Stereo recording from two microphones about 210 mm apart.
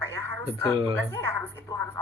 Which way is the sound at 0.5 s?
25° right (ahead or behind).